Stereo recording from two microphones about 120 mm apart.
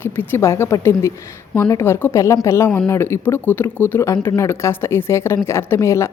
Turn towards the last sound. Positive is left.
turn(degrees=25)  # may be behind; listen again after turning